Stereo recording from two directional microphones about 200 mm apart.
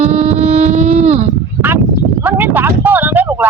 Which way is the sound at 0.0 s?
35° right (ahead or behind).